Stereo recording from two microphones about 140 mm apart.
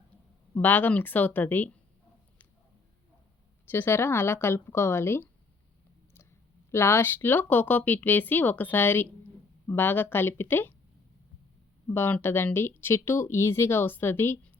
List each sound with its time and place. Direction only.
0.6 s speech: 15° left (ahead or behind)
3.7 s speech: 15° left (ahead or behind)
6.7 s speech: 20° left (ahead or behind)
11.9 s speech: 15° left (ahead or behind)